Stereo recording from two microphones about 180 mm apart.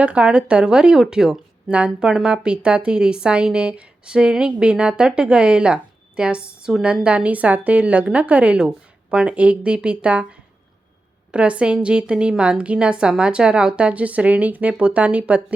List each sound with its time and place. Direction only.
0.0 s a woman's voice: 5° right (ahead or behind)
11.3 s a woman's voice: 5° right (ahead or behind)